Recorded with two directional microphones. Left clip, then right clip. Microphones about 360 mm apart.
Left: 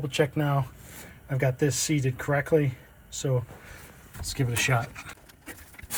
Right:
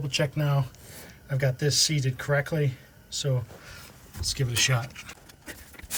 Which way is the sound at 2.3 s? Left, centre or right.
Left.